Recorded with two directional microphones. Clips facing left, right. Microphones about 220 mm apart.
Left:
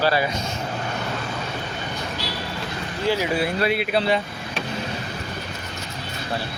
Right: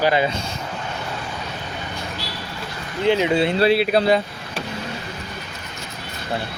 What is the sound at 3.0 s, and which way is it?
Speech, 20° right (ahead or behind).